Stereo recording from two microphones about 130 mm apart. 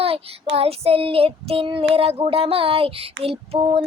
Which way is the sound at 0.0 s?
50° right (ahead or behind).